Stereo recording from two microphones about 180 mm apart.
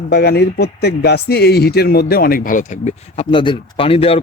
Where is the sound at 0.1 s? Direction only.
65° left (ahead or behind); by 3.2 s 40° left (ahead or behind).